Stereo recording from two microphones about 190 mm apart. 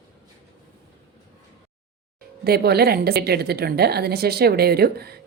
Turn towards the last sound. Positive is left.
turn(degrees=-55)  # may be behind; listen again after turning